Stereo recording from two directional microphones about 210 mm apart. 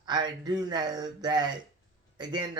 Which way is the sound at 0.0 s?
20° right (ahead or behind).